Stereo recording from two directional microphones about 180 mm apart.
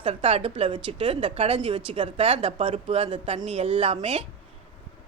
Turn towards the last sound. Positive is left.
turn(degrees=-30)  # may be behind; listen again after turning